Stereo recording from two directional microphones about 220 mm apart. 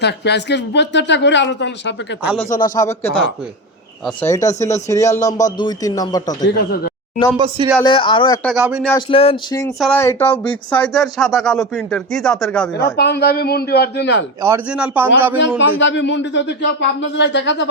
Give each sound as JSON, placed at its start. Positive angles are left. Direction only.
{"t": 0.0, "sound": "speech", "side_deg": 50}
{"t": 2.2, "sound": "speech", "side_deg": 0}
{"t": 2.7, "sound": "speech", "side_deg": 15}
{"t": 6.5, "sound": "speech", "side_deg": 45}
{"t": 7.3, "sound": "speech", "side_deg": -20}
{"t": 7.9, "sound": "a sound", "side_deg": 20}
{"t": 8.4, "sound": "speech", "side_deg": -5}
{"t": 9.0, "sound": "a sound", "side_deg": 25}
{"t": 9.8, "sound": "speech", "side_deg": 10}
{"t": 12.7, "sound": "speech", "side_deg": 50}
{"t": 14.4, "sound": "a man's voice", "side_deg": -10}
{"t": 15.4, "sound": "a man's voice", "side_deg": 55}